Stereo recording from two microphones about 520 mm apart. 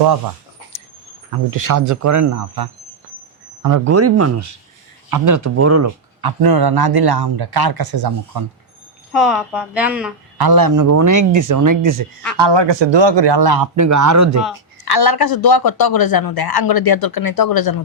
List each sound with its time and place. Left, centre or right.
1.5 s speech: right
6.2 s a man's voice: right
9.1 s speech: centre
10.3 s speech: right
12.4 s a man's voice: right
14.8 s speech: left